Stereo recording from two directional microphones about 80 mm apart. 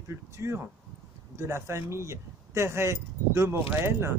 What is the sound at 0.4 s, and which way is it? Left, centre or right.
Speech, right.